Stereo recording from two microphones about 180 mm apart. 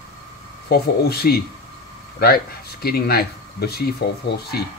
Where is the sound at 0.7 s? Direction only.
60° left (ahead or behind).